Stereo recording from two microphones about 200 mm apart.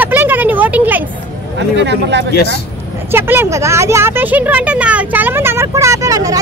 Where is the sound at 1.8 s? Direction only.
60° right (ahead or behind).